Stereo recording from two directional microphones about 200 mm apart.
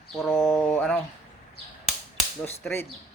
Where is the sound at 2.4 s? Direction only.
10° left (ahead or behind).